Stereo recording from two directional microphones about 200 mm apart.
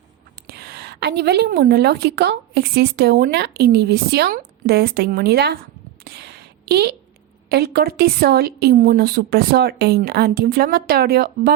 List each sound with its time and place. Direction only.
0.3 s a woman's voice: 50° right (ahead or behind)
6.1 s a sound: 55° right (ahead or behind)
7.5 s a woman's voice: 50° right (ahead or behind)